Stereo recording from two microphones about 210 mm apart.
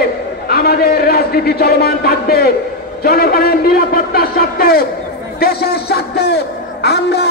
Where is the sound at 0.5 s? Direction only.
45° left (ahead or behind).